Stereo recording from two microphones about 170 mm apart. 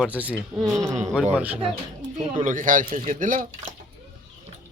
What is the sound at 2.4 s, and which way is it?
A man's voice, 50° right (ahead or behind).